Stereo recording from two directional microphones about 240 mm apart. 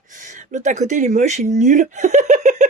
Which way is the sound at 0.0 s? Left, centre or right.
Right.